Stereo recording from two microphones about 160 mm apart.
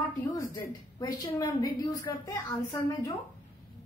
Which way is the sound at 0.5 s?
25° left (ahead or behind).